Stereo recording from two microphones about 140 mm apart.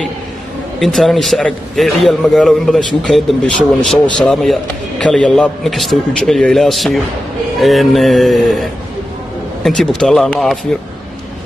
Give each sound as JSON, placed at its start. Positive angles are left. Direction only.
{"t": 0.7, "sound": "a man's voice", "side_deg": 0}